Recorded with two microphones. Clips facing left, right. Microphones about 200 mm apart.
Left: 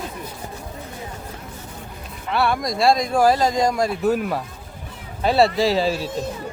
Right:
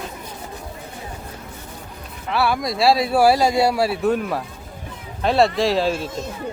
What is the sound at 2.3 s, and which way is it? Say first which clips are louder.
Speech: even; centre (ahead or behind).